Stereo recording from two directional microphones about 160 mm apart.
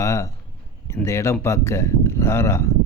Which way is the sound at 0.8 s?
15° left (ahead or behind).